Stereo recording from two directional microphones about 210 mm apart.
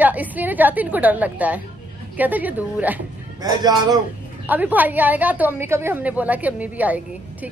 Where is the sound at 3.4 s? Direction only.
20° right (ahead or behind).